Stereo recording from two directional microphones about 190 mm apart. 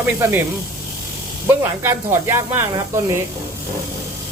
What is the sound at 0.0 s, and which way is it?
Speech, 15° right (ahead or behind).